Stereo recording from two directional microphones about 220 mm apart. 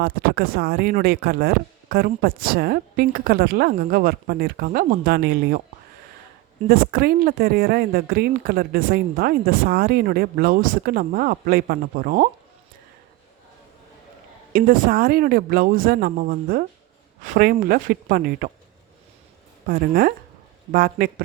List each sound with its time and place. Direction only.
0.0 s speech: 45° right (ahead or behind)
6.7 s speech: 40° right (ahead or behind)
14.5 s speech: 40° right (ahead or behind)
19.6 s speech: 40° right (ahead or behind)